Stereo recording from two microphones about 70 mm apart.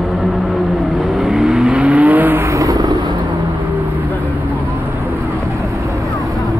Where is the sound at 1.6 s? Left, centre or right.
Centre.